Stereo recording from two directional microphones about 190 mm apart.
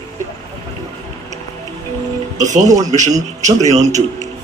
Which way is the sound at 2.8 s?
40° right (ahead or behind).